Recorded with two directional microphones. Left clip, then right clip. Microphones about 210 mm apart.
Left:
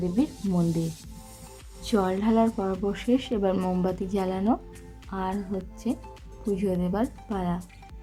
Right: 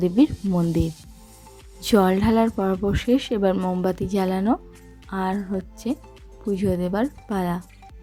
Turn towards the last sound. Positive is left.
turn(degrees=-30)  # may be behind; listen again after turning